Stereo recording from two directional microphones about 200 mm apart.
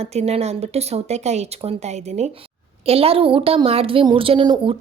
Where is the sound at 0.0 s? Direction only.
30° right (ahead or behind).